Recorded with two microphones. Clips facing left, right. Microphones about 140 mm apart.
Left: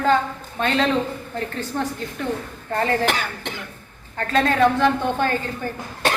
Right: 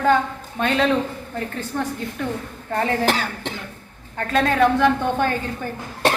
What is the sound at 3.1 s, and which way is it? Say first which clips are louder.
Speech: right 2 dB; 35° right (ahead or behind).